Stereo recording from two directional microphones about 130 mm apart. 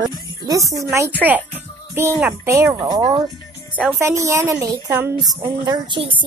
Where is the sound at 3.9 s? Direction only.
25° right (ahead or behind).